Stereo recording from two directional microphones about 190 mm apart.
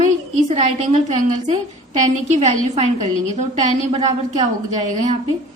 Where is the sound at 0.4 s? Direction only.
35° right (ahead or behind).